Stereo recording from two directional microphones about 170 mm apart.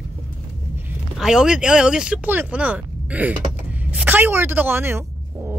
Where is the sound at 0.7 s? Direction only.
5° right (ahead or behind).